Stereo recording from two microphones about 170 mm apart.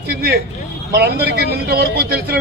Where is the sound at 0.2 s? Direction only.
70° right (ahead or behind).